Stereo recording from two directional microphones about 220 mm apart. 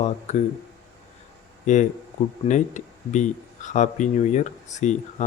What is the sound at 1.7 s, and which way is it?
Speech, 35° left (ahead or behind).